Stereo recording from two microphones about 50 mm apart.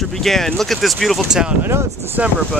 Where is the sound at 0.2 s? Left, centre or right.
Centre.